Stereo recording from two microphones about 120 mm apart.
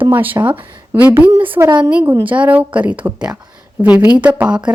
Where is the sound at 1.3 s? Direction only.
45° right (ahead or behind).